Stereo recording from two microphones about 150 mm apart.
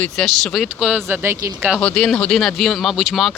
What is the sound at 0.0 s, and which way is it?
Speech, centre (ahead or behind).